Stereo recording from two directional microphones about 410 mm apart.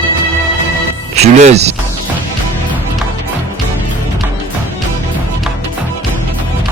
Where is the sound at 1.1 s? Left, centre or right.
Centre.